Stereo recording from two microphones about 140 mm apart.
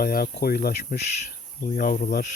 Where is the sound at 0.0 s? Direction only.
90° left.